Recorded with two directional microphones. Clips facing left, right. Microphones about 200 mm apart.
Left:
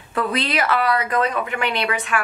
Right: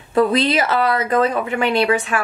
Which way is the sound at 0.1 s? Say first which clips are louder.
Right 7 dB; 25° right (ahead or behind).